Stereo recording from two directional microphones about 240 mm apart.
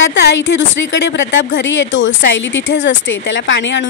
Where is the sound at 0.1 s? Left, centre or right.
Left.